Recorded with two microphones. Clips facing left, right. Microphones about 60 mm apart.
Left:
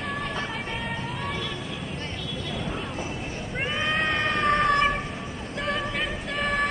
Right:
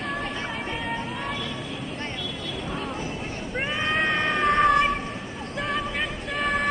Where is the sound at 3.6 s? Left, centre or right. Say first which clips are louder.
Right 1 dB; centre.